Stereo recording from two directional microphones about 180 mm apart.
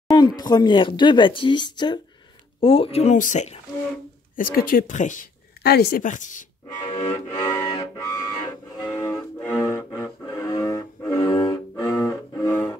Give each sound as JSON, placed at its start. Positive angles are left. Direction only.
{"t": 0.4, "sound": "speech", "side_deg": 25}
{"t": 6.8, "sound": "a sound", "side_deg": 25}
{"t": 9.0, "sound": "music", "side_deg": 15}